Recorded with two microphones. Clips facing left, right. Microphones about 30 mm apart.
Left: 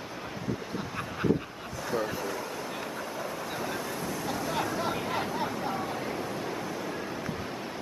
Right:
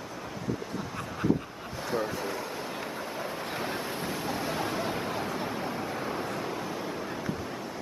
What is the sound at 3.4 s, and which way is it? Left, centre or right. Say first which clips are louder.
Vehicle: right 1 dB; right.